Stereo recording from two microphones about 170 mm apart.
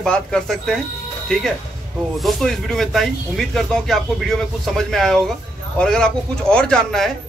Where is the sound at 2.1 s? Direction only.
Centre (ahead or behind).